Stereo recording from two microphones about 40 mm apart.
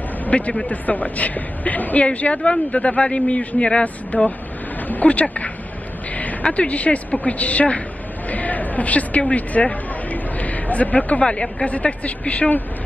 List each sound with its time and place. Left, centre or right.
0.3 s speech: left
0.7 s speech: left
2.0 s speech: left